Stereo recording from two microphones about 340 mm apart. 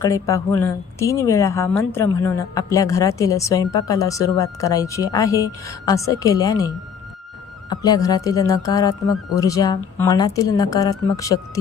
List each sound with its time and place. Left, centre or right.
0.0 s speech: centre